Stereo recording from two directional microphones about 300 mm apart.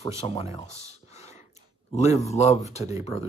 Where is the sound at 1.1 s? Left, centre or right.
Left.